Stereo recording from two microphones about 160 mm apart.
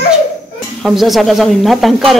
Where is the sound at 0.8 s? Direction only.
Centre (ahead or behind).